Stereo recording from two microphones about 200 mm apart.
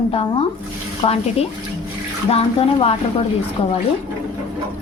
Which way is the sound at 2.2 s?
30° left (ahead or behind).